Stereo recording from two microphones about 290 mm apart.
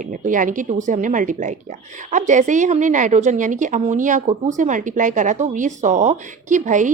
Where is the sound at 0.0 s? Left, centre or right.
Right.